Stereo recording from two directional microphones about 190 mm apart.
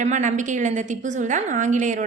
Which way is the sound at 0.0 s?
40° right (ahead or behind).